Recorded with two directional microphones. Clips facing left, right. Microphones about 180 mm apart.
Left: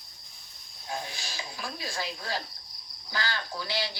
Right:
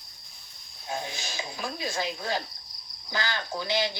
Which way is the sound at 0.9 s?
20° right (ahead or behind).